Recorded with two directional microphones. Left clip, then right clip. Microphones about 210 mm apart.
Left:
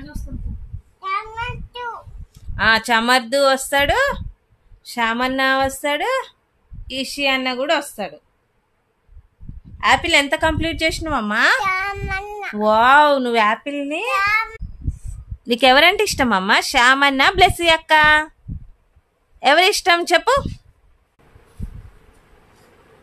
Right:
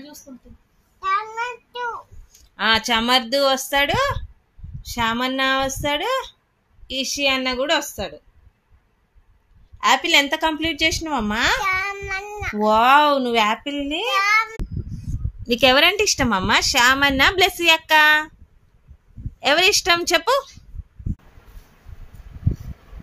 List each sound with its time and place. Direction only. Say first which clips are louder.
0.9 s child singing: right 2 dB; 5° left (ahead or behind)
1.7 s a sound: right 1 dB; 5° left (ahead or behind)
2.5 s a sound: left 3 dB; 20° left (ahead or behind)
2.9 s a woman's voice: left 2 dB; 20° left (ahead or behind)
9.8 s a woman's voice: left 1 dB; 15° left (ahead or behind)
19.4 s a woman's voice: left 3 dB; 15° left (ahead or behind)